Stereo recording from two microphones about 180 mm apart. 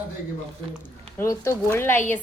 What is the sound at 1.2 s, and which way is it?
Speech, 15° left (ahead or behind).